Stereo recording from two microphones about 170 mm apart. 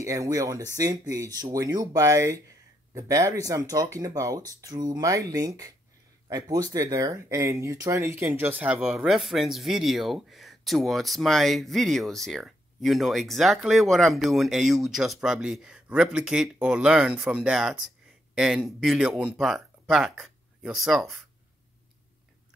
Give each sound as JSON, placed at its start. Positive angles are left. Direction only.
{"t": 0.0, "sound": "speech", "side_deg": -20}